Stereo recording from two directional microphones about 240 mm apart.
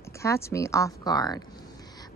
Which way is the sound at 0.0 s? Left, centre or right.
Centre.